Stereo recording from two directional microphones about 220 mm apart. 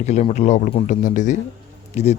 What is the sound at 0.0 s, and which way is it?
A man's voice, 30° left (ahead or behind).